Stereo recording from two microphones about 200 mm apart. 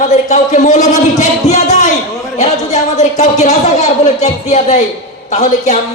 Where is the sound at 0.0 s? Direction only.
35° left (ahead or behind).